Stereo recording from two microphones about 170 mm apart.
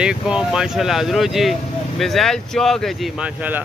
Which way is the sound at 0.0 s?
5° right (ahead or behind).